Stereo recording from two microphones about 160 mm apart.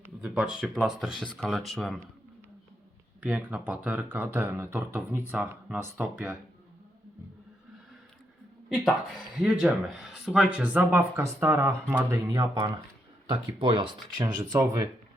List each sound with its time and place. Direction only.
0.0 s speech: 5° right (ahead or behind)
3.2 s speech: 10° right (ahead or behind)
8.7 s speech: centre (ahead or behind); by 13.9 s 35° right (ahead or behind)
14.2 s speech: 20° right (ahead or behind)